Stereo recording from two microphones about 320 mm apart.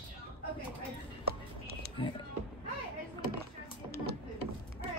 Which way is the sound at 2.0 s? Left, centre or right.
Centre.